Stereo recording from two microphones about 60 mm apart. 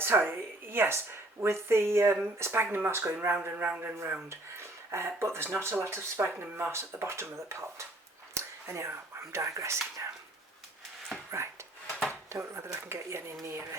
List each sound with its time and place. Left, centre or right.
0.0 s a woman's voice: right
3.5 s a man's voice: right
4.3 s speech: right
8.3 s a sound: right
9.3 s speech: right
12.3 s speech: right